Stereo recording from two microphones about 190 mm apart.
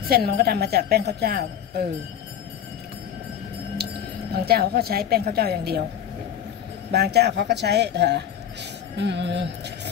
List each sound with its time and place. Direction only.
0.1 s speech: 55° right (ahead or behind)
3.8 s a sound: 55° right (ahead or behind)
4.5 s speech: 55° right (ahead or behind)
6.9 s speech: 60° right (ahead or behind)